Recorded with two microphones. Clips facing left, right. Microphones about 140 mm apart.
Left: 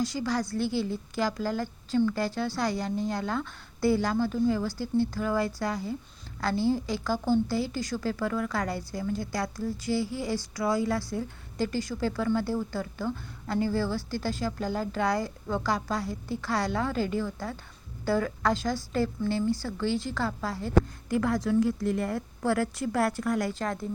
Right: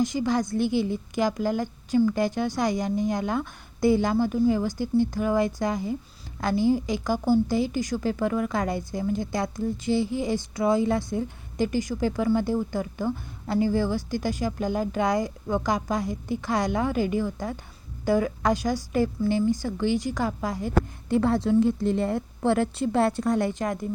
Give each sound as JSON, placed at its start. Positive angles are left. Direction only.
{"t": 0.0, "sound": "a woman's voice", "side_deg": -20}
{"t": 21.1, "sound": "a woman's voice", "side_deg": -30}